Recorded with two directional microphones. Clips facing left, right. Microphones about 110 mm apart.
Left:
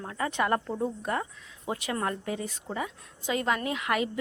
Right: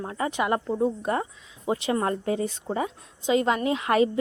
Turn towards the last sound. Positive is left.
turn(degrees=-30)  # may be behind; listen again after turning